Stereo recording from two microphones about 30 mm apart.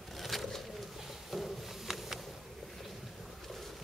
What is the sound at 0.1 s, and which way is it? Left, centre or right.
Pigeon, centre.